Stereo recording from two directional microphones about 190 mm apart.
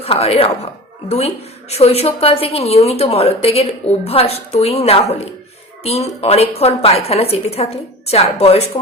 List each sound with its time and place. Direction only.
0.0 s a woman's voice: 30° left (ahead or behind)